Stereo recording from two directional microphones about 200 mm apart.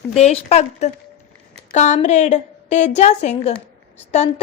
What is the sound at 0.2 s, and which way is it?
A woman's voice, 35° left (ahead or behind).